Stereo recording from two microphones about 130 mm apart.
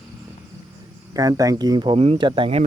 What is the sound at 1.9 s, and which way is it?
Speech, 50° right (ahead or behind).